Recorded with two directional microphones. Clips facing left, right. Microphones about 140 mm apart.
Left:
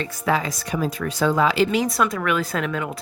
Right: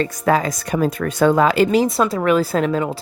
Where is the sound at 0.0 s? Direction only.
45° right (ahead or behind).